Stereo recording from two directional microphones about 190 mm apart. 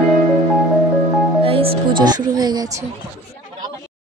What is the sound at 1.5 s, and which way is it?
Speech, 30° right (ahead or behind).